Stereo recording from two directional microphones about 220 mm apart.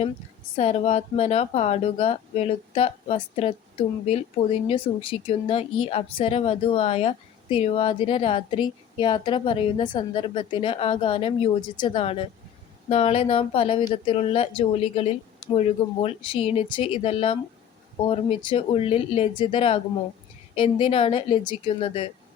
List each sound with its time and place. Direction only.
0.5 s speech: 30° left (ahead or behind)